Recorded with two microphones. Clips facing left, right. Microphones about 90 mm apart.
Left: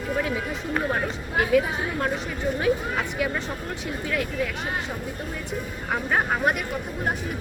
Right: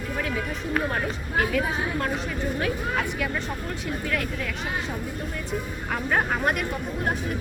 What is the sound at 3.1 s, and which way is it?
Speech, 10° left (ahead or behind).